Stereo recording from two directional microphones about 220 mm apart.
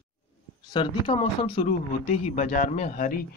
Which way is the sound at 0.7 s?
25° left (ahead or behind).